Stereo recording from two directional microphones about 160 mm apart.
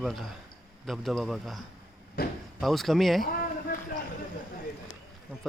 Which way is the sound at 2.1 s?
70° left (ahead or behind).